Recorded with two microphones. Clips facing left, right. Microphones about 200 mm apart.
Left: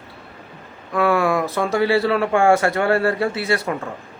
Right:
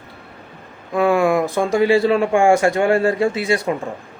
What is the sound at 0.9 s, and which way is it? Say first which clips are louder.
A man's voice: right 3 dB; 15° right (ahead or behind).